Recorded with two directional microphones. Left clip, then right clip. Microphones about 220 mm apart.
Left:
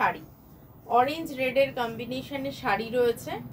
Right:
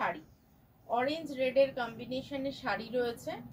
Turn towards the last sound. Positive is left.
turn(degrees=15)  # may be behind; listen again after turning